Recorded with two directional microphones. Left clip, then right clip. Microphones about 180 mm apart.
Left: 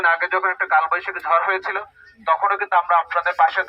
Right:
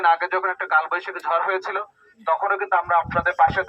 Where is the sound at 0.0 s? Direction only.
45° right (ahead or behind).